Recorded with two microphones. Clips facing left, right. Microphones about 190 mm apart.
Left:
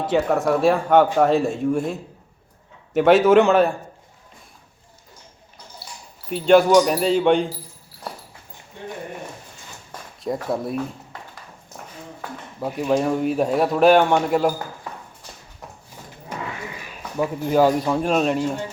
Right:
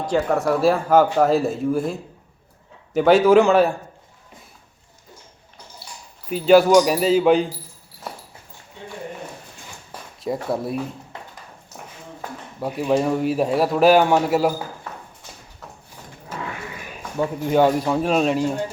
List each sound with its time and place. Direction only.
0.0 s a man's voice: centre (ahead or behind)
6.3 s a man's voice: 5° right (ahead or behind)
10.5 s a man's voice: centre (ahead or behind)
12.5 s a man's voice: centre (ahead or behind)
17.2 s a man's voice: centre (ahead or behind)